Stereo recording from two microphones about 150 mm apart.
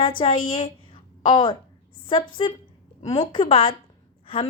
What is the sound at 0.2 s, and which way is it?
A woman's voice, 35° left (ahead or behind).